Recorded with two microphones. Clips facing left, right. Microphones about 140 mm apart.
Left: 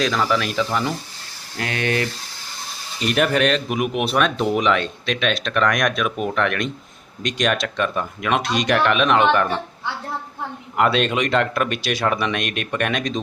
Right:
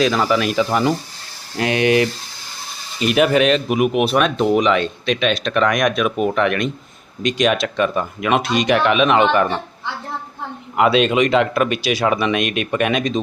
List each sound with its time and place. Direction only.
0.0 s speech: 5° right (ahead or behind)
3.0 s speech: 5° right (ahead or behind)
10.8 s speech: centre (ahead or behind)